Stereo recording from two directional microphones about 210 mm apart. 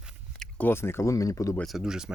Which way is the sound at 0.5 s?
10° left (ahead or behind).